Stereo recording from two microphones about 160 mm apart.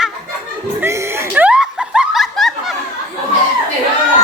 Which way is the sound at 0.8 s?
10° right (ahead or behind).